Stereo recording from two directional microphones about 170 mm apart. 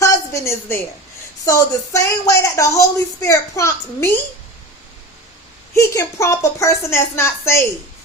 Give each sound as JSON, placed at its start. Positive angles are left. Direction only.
{"t": 0.0, "sound": "a sound", "side_deg": 20}
{"t": 1.5, "sound": "speech", "side_deg": 20}
{"t": 5.7, "sound": "a woman's voice", "side_deg": 20}